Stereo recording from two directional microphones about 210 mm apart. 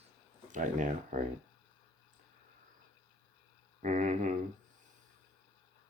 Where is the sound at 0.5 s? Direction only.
40° right (ahead or behind).